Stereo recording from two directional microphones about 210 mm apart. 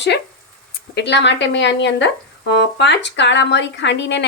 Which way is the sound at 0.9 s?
55° left (ahead or behind).